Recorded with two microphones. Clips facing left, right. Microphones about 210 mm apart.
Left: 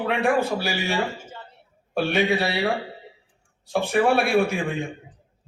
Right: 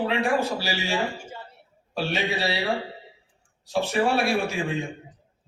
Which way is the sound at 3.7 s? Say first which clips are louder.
Left 3 dB; 55° left (ahead or behind).